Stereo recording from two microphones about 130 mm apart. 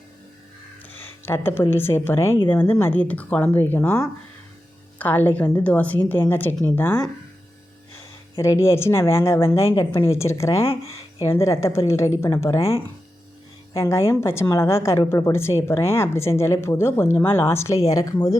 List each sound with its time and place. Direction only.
0.9 s speech: 15° left (ahead or behind)
8.4 s a woman's voice: 20° left (ahead or behind)
13.7 s a woman's voice: 20° left (ahead or behind)